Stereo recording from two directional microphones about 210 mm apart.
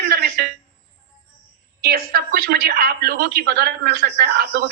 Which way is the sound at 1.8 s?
45° right (ahead or behind).